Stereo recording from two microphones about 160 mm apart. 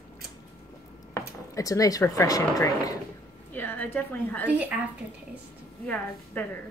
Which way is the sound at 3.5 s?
10° left (ahead or behind).